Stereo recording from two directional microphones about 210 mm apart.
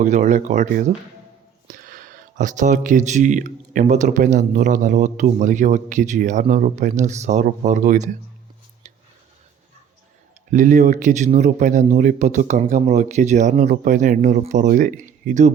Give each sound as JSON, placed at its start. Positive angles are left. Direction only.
{"t": 0.0, "sound": "speech", "side_deg": -35}
{"t": 10.5, "sound": "speech", "side_deg": -35}